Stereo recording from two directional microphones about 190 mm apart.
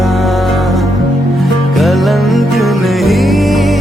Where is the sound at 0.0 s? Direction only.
Centre (ahead or behind).